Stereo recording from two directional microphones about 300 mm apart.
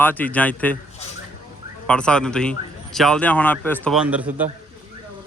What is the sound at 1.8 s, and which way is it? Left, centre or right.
Speech, centre.